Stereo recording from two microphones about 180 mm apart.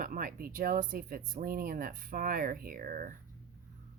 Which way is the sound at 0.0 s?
50° right (ahead or behind).